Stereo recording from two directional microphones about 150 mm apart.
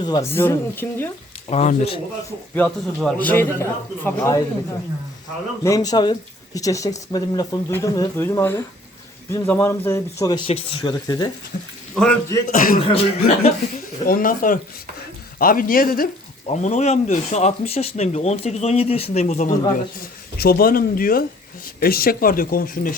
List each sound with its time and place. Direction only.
0.0 s speech: 30° left (ahead or behind)
0.3 s a man's voice: 15° left (ahead or behind)
1.5 s speech: 45° left (ahead or behind)
2.6 s a man's voice: 10° left (ahead or behind)
5.6 s a man's voice: 25° left (ahead or behind)
10.3 s speech: 35° left (ahead or behind)
11.5 s speech: 55° left (ahead or behind)
12.5 s speech: 70° left (ahead or behind)
12.8 s speech: 40° left (ahead or behind)
14.0 s speech: 70° left (ahead or behind)
16.5 s speech: 50° left (ahead or behind)
19.7 s speech: 80° left
21.8 s speech: 85° left; by 23.0 s 70° left (ahead or behind)